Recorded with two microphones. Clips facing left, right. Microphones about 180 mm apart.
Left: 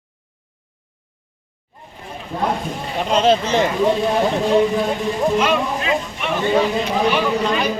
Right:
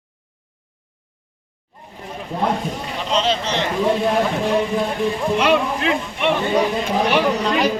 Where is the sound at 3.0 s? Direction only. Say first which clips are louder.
Left 5 dB; 50° left (ahead or behind).